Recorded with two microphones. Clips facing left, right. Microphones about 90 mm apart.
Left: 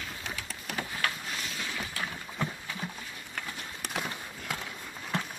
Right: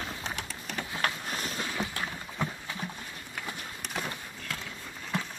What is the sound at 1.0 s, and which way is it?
Boat, 40° right (ahead or behind).